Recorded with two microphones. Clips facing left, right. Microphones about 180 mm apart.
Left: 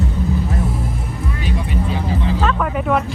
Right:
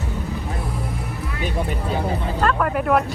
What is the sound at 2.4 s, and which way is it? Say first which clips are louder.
Speech: right 4 dB; centre (ahead or behind).